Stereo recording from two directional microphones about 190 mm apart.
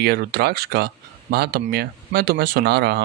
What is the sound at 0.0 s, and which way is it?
Speech, 55° right (ahead or behind).